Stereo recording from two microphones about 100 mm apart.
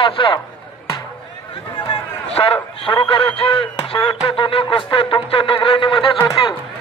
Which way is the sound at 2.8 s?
60° left (ahead or behind).